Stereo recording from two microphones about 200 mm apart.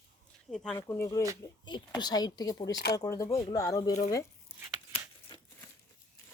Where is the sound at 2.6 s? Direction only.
60° left (ahead or behind).